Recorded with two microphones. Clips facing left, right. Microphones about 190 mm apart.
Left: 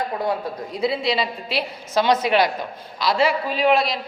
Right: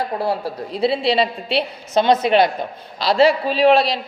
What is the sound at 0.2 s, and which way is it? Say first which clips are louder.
A man's voice: right 2 dB; 30° right (ahead or behind).